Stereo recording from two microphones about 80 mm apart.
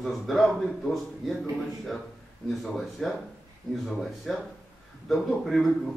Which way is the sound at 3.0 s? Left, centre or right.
Centre.